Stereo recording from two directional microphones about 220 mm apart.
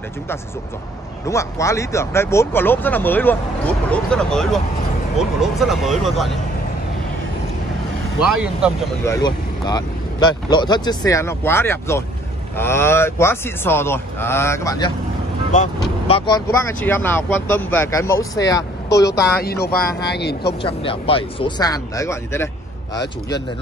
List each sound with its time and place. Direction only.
1.2 s speech: 15° left (ahead or behind)
8.2 s speech: 5° right (ahead or behind)
9.0 s speech: 15° left (ahead or behind)
19.4 s speech: 45° left (ahead or behind)
20.6 s speech: 25° left (ahead or behind)